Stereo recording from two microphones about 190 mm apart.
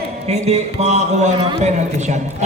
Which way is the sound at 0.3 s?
35° right (ahead or behind).